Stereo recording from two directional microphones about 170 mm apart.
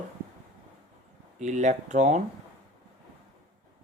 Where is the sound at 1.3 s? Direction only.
40° right (ahead or behind).